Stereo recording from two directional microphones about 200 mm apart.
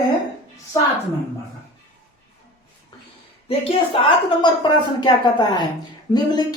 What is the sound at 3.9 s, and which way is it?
A woman's voice, 25° left (ahead or behind).